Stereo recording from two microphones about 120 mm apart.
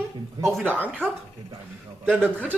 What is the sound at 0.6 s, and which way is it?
Mantra, 15° left (ahead or behind).